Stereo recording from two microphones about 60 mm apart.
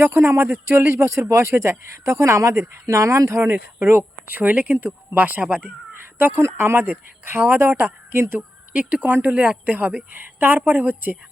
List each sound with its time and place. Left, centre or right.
0.0 s speech: right
3.5 s speech: right
8.7 s a woman's voice: right